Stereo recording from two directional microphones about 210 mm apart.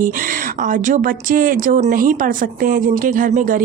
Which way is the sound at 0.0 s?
40° right (ahead or behind).